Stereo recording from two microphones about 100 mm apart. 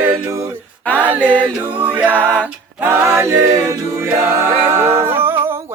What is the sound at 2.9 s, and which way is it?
A capella, 25° right (ahead or behind).